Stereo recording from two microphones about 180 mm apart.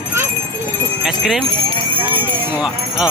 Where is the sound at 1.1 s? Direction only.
Centre (ahead or behind).